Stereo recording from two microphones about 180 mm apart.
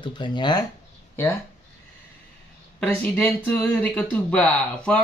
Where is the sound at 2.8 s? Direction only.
5° left (ahead or behind).